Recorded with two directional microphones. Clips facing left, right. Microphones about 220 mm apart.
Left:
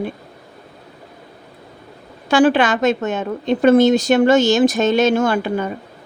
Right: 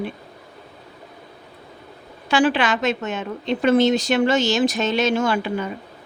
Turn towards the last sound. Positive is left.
turn(degrees=50)  # may be behind; listen again after turning